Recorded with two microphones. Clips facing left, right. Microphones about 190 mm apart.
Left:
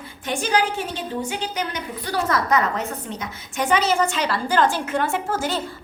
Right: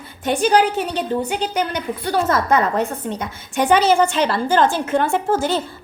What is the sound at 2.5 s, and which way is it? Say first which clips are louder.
A woman's voice: right 4 dB; 30° right (ahead or behind).